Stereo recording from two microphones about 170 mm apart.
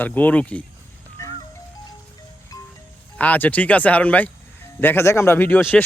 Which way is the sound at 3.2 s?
10° left (ahead or behind).